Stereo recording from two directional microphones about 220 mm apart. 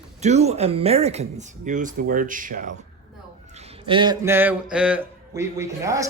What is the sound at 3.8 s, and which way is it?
Speech, 20° right (ahead or behind).